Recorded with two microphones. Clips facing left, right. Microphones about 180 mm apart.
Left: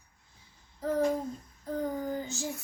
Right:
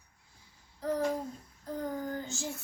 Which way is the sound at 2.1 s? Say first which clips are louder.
Left 3 dB; 15° left (ahead or behind).